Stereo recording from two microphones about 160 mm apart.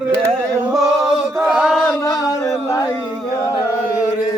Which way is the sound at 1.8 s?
20° left (ahead or behind).